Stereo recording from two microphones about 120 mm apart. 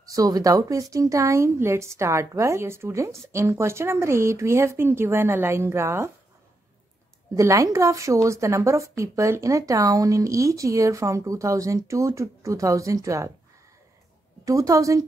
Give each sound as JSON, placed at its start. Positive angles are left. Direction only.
{"t": 0.0, "sound": "a woman's voice", "side_deg": -30}
{"t": 7.3, "sound": "a woman's voice", "side_deg": -25}
{"t": 14.4, "sound": "a woman's voice", "side_deg": -30}